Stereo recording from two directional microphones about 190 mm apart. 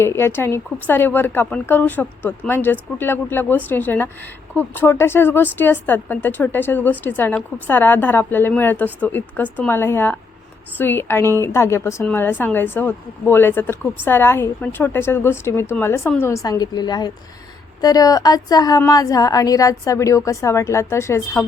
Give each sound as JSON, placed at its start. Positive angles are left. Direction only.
{"t": 0.0, "sound": "speech", "side_deg": 15}